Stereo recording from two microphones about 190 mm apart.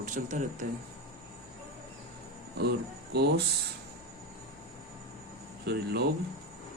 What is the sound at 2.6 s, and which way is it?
Speech, 60° right (ahead or behind).